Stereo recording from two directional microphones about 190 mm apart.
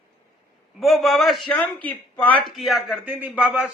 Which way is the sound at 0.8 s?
Centre (ahead or behind).